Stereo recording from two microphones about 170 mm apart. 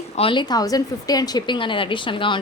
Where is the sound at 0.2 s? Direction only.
30° left (ahead or behind).